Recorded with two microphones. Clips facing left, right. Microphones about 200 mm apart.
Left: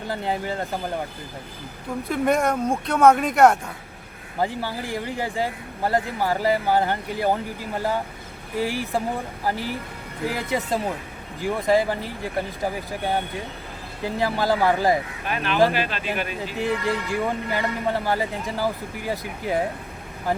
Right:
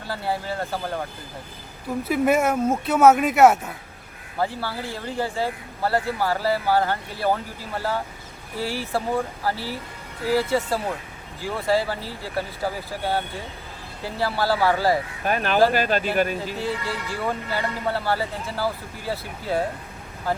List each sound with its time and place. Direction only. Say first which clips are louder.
0.1 s speech: even; 20° left (ahead or behind)
2.0 s speech: right 1 dB; 5° right (ahead or behind)
4.4 s speech: left 1 dB; 15° left (ahead or behind)
15.2 s speech: right 3 dB; 45° right (ahead or behind)
16.6 s speech: left 4 dB; 15° left (ahead or behind)